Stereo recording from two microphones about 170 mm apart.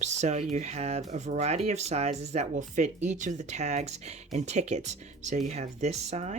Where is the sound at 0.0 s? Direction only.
40° right (ahead or behind).